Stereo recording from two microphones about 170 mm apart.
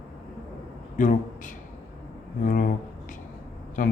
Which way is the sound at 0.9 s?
50° left (ahead or behind).